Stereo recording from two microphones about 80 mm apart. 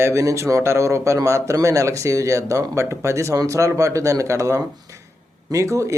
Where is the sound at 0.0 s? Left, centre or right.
Right.